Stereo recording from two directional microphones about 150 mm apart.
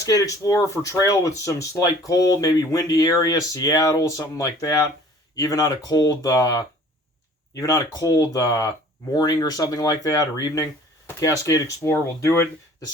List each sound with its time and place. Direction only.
0.0 s speech: 25° left (ahead or behind)